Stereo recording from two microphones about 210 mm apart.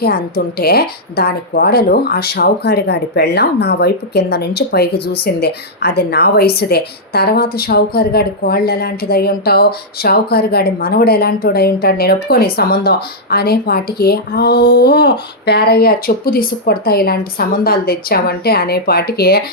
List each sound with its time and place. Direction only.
0.0 s a woman's voice: 50° left (ahead or behind)